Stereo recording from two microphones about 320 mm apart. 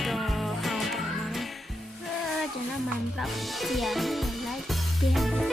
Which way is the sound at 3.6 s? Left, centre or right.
Centre.